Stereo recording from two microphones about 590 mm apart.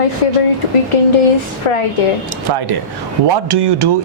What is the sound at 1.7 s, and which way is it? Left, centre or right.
Speech, left.